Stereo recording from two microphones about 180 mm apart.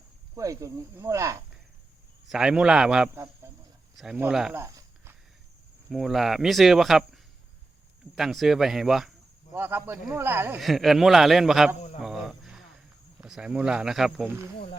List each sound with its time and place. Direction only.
0.3 s speech: 15° right (ahead or behind)
2.2 s speech: 5° right (ahead or behind)
3.4 s cricket: 15° right (ahead or behind)
3.9 s speech: 5° right (ahead or behind)
4.6 s a sound: 15° right (ahead or behind)
5.9 s speech: centre (ahead or behind)
9.5 s speech: 10° right (ahead or behind)
10.6 s speech: centre (ahead or behind)
11.9 s cricket: centre (ahead or behind)
13.2 s speech: 5° right (ahead or behind)